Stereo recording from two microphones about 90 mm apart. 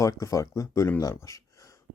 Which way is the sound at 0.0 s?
40° left (ahead or behind).